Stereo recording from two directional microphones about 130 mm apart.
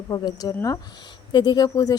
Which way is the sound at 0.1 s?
30° left (ahead or behind).